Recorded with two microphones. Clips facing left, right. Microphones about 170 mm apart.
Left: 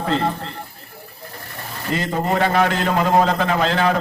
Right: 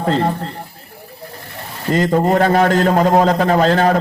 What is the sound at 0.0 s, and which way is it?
Speech, 40° right (ahead or behind).